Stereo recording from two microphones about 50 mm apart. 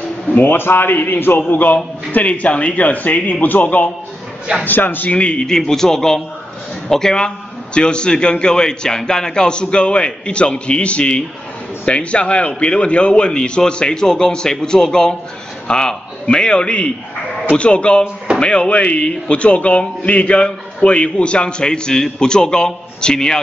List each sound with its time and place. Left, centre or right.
0.4 s a man's voice: left
5.1 s a man's voice: left